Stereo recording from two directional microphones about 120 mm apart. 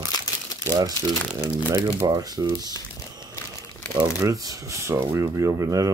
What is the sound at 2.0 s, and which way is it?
Speech, 30° right (ahead or behind).